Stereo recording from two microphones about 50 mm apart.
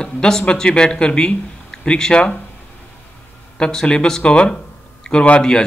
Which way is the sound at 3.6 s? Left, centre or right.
Centre.